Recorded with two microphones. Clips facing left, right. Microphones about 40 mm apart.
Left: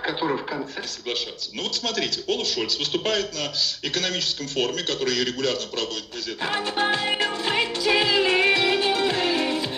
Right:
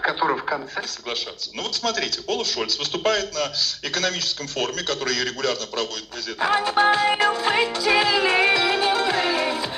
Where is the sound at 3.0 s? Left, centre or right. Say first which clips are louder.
Right 4 dB; right.